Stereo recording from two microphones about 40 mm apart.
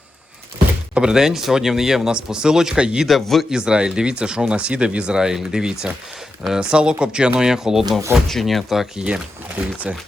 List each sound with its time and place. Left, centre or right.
0.9 s speech: centre
3.1 s speech: centre
3.5 s speech: right
7.9 s speech: centre
9.0 s speech: right
9.9 s speech: right